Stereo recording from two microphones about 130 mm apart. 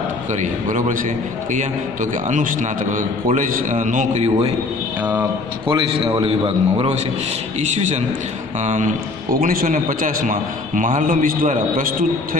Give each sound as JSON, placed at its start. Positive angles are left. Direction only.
{"t": 0.3, "sound": "a man's voice", "side_deg": -70}
{"t": 5.0, "sound": "speech", "side_deg": -15}
{"t": 5.7, "sound": "a man's voice", "side_deg": -40}
{"t": 7.6, "sound": "a man's voice", "side_deg": -60}